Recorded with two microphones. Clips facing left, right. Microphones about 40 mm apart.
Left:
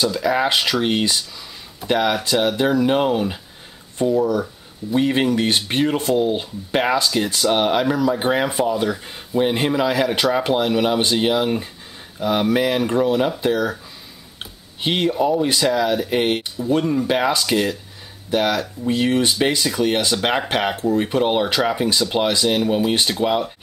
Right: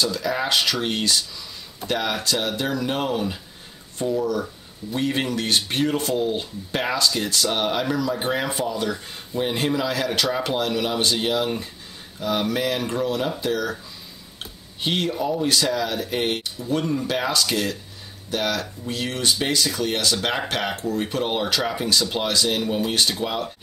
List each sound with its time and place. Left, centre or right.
0.0 s speech: centre